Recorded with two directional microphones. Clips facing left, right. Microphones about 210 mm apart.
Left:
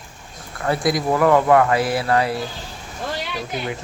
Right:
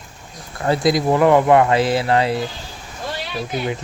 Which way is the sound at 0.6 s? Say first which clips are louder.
Right 3 dB; 25° right (ahead or behind).